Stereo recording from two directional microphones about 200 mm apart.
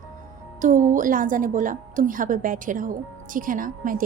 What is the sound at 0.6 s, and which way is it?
A woman's voice, 40° right (ahead or behind).